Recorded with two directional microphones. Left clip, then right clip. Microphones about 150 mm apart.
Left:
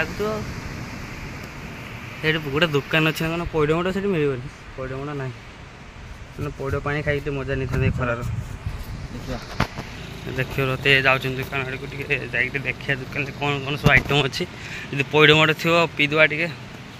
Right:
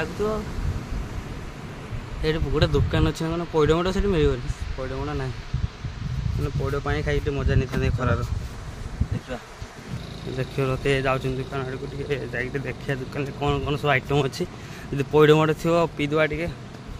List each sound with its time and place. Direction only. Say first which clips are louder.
0.0 s speech: left 1 dB; 5° right (ahead or behind)
2.2 s speech: left 3 dB; 5° left (ahead or behind)
6.6 s speech: left 2 dB; 15° left (ahead or behind)
7.3 s speech: left 1 dB; 5° left (ahead or behind)
10.3 s speech: left 2 dB; 5° right (ahead or behind)
10.9 s speech: left 8 dB; 15° right (ahead or behind)
15.0 s speech: left 2 dB; 35° right (ahead or behind); by 16.5 s 5° right (ahead or behind)